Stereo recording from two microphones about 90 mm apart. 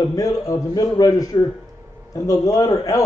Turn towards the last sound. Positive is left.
turn(degrees=40)  # may be behind; listen again after turning